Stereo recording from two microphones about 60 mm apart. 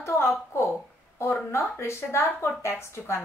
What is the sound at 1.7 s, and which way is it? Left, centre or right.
A woman's voice, left.